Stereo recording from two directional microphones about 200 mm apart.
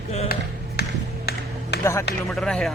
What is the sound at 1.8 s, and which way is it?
Speech, 15° left (ahead or behind).